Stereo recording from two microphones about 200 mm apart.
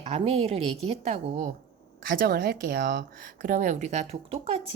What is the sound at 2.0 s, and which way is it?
Speech, 50° right (ahead or behind).